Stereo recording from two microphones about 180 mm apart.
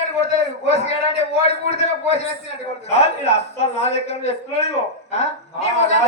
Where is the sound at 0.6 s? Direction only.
35° left (ahead or behind).